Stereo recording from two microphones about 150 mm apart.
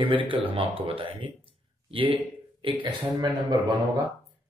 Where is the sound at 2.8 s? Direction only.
30° right (ahead or behind).